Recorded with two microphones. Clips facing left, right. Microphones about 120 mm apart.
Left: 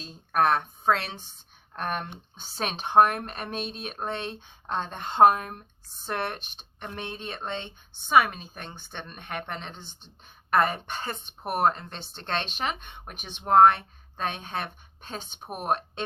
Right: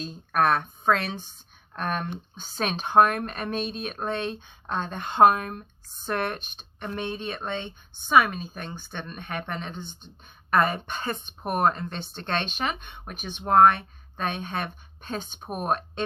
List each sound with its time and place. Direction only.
0.0 s a woman's voice: 25° left (ahead or behind)